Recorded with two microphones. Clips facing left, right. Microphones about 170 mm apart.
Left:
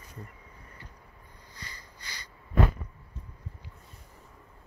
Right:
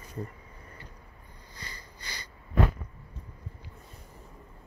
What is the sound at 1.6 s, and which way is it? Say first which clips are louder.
Sniff: right 2 dB; 30° right (ahead or behind).